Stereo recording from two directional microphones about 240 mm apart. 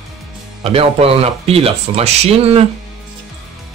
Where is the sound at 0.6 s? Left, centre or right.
Right.